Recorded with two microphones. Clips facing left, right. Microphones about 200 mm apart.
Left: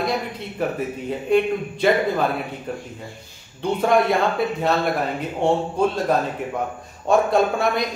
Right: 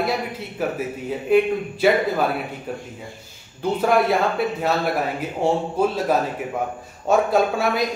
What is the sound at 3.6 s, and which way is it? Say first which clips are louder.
Speech: even; 5° right (ahead or behind).